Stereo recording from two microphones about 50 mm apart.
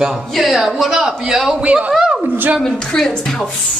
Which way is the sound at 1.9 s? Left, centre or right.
Centre.